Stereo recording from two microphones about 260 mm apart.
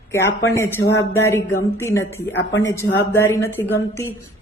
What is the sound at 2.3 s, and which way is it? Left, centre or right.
Speech, left.